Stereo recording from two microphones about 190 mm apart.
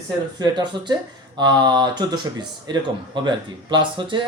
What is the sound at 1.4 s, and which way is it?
Speech, 20° right (ahead or behind).